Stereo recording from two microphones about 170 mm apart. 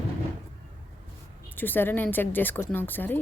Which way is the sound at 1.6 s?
10° left (ahead or behind).